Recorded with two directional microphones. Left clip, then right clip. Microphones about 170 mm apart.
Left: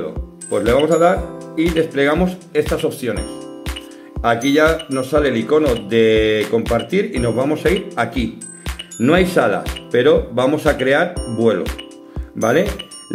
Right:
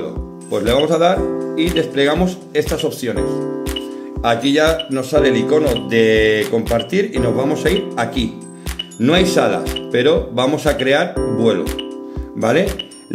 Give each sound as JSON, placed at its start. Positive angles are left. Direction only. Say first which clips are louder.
{"t": 0.5, "sound": "speech", "louder": "left 1 dB", "side_deg": -15}
{"t": 4.2, "sound": "speech", "louder": "even", "side_deg": -15}